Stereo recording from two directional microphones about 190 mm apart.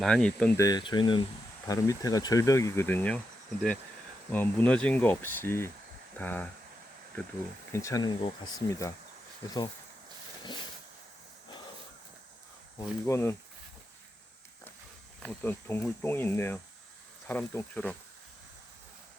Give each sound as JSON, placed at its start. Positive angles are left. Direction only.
{"t": 0.0, "sound": "speech", "side_deg": 5}
{"t": 0.6, "sound": "speech", "side_deg": 25}
{"t": 4.3, "sound": "speech", "side_deg": 5}
{"t": 7.7, "sound": "speech", "side_deg": 15}
{"t": 12.8, "sound": "speech", "side_deg": 15}
{"t": 15.2, "sound": "speech", "side_deg": 10}